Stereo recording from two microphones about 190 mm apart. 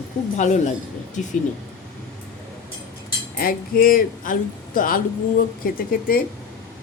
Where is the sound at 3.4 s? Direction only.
50° left (ahead or behind).